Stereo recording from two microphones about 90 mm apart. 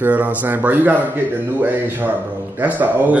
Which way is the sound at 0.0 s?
20° right (ahead or behind).